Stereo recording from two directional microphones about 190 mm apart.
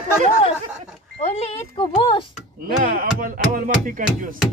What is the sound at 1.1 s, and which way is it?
Speech, 35° left (ahead or behind).